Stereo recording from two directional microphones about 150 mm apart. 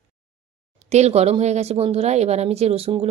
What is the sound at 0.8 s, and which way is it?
Speech, 45° right (ahead or behind).